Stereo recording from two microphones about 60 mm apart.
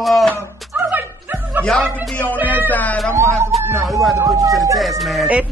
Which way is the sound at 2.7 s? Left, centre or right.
Left.